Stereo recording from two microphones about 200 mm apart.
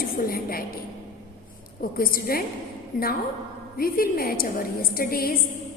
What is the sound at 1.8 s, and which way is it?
Speech, 45° left (ahead or behind).